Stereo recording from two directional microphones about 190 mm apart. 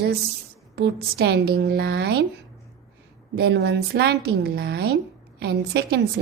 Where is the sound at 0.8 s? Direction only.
60° right (ahead or behind).